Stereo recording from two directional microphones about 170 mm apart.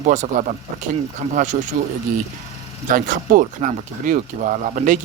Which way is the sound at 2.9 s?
55° right (ahead or behind).